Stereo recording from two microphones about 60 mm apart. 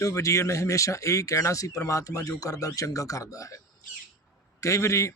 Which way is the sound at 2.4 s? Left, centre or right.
Left.